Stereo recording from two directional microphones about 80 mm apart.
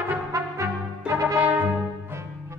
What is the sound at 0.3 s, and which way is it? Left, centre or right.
Brass instrument, right.